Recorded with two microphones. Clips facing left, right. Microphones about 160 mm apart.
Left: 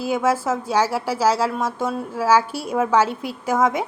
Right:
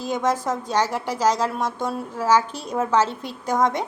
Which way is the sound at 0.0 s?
5° left (ahead or behind).